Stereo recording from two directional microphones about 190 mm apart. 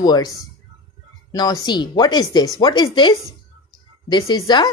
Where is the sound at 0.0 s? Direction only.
20° left (ahead or behind).